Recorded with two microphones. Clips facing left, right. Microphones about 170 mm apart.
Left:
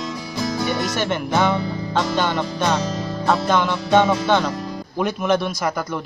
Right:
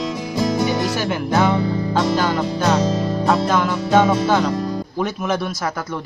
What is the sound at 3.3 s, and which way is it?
Music, 5° right (ahead or behind).